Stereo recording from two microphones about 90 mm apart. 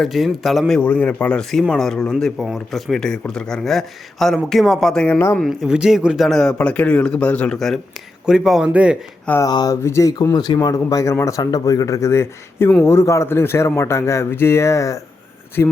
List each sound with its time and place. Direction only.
0.0 s speech: centre (ahead or behind)
0.7 s speech: 15° left (ahead or behind)
5.1 s speech: 20° left (ahead or behind)
5.5 s speech: 5° right (ahead or behind)
6.2 s speech: 5° left (ahead or behind)
8.3 s speech: 5° right (ahead or behind)
9.5 s speech: 50° left (ahead or behind)
9.8 s a man's voice: 30° left (ahead or behind)
10.3 s a man's voice: 50° left (ahead or behind); by 11.3 s 30° left (ahead or behind)
11.3 s a man's voice: 40° left (ahead or behind)
15.6 s speech: 25° left (ahead or behind)